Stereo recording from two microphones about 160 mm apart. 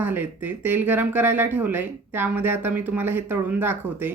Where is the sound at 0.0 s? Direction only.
10° right (ahead or behind).